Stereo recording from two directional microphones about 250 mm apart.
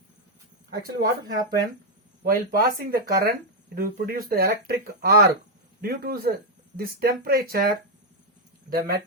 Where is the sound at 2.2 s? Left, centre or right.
Right.